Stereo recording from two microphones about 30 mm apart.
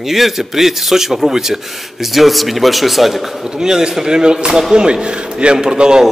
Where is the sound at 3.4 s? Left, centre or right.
Centre.